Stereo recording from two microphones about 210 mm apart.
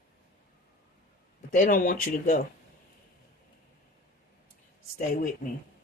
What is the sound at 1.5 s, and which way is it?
Speech, 40° left (ahead or behind).